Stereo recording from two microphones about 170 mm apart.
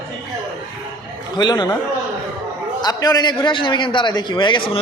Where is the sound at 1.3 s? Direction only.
25° left (ahead or behind).